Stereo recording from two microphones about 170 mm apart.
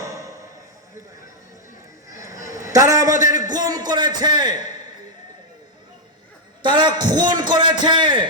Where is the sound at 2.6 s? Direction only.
20° right (ahead or behind).